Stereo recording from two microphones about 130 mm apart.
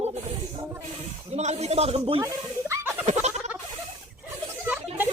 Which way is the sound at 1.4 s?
55° right (ahead or behind).